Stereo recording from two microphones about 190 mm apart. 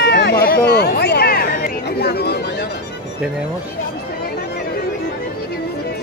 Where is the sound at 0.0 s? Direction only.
60° left (ahead or behind).